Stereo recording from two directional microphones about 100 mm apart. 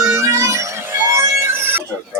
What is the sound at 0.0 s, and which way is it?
Music, 30° right (ahead or behind).